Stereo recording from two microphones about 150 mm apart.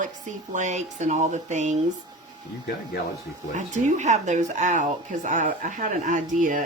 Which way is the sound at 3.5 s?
50° right (ahead or behind).